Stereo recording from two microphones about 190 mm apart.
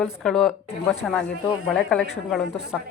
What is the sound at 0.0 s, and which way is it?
A woman's voice, 5° left (ahead or behind).